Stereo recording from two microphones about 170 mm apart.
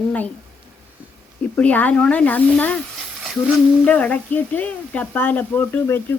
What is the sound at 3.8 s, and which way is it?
Speech, 10° left (ahead or behind).